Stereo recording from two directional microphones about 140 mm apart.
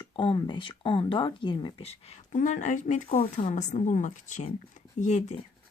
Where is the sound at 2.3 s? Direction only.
60° left (ahead or behind).